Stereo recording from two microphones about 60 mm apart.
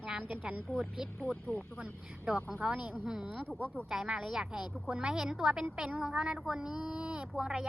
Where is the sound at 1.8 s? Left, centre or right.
Centre.